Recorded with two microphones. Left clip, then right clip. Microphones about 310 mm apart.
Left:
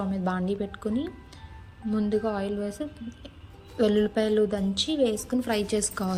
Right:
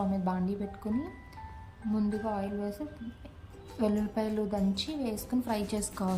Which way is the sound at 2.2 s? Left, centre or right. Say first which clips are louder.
Left 5 dB; centre.